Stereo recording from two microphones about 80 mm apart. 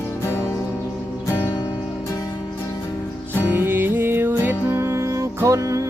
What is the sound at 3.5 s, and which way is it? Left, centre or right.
Music, right.